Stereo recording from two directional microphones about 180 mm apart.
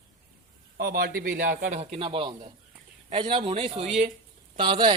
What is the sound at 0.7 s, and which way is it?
A man's voice, 55° right (ahead or behind).